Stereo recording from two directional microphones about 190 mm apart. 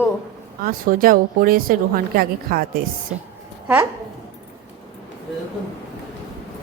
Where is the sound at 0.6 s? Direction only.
50° right (ahead or behind).